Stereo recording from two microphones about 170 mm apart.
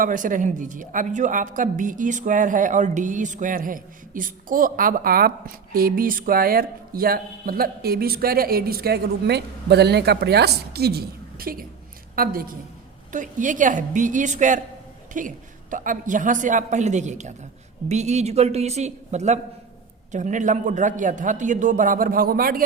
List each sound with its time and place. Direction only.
0.0 s a woman's voice: 50° right (ahead or behind)